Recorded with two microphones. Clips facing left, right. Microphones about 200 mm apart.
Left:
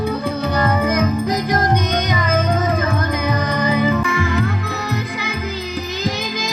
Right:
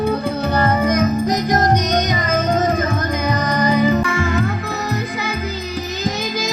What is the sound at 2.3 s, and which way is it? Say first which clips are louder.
Music: left 1 dB; 55° left (ahead or behind).